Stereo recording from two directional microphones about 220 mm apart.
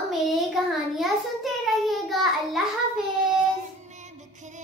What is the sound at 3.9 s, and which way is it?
Music, 30° right (ahead or behind).